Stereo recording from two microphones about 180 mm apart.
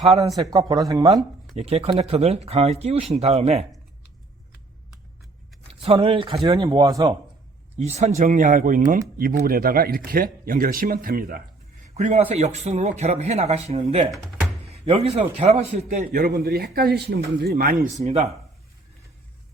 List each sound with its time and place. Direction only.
0.3 s speech: 20° right (ahead or behind)
1.5 s speech: 35° right (ahead or behind)
5.8 s speech: 30° right (ahead or behind)
7.9 s speech: 40° right (ahead or behind); by 11.4 s 55° right (ahead or behind)
11.9 s speech: 40° right (ahead or behind)
14.1 s speech: centre (ahead or behind)
14.7 s speech: 35° right (ahead or behind)
16.4 s speech: 65° right (ahead or behind)
17.9 s speech: 35° right (ahead or behind)